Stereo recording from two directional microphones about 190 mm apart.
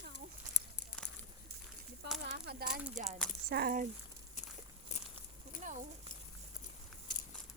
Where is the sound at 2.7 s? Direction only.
5° right (ahead or behind).